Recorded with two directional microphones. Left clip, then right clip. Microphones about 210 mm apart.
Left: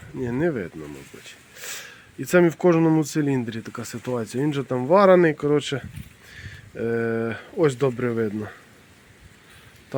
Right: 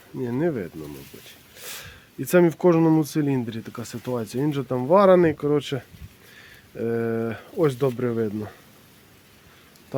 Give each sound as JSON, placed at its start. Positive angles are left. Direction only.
{"t": 0.2, "sound": "speech", "side_deg": 0}